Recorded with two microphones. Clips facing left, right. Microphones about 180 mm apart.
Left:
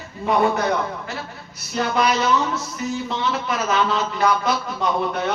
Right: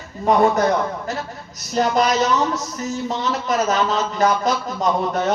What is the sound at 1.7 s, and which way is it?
Speech, 40° right (ahead or behind).